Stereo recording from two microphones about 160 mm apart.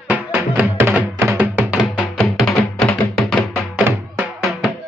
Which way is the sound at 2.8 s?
5° left (ahead or behind).